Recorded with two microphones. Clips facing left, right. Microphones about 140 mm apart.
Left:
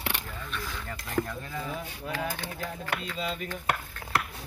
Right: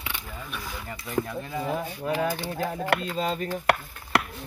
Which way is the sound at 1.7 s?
60° right (ahead or behind).